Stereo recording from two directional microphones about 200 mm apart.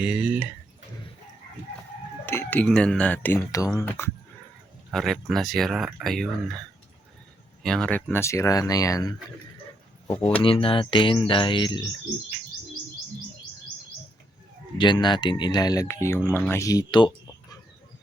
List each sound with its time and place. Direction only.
0.0 s speech: 5° right (ahead or behind)
2.2 s speech: 10° left (ahead or behind)
4.9 s speech: centre (ahead or behind); by 9.1 s 15° left (ahead or behind)
10.4 s speech: 25° left (ahead or behind)
14.8 s speech: 20° left (ahead or behind)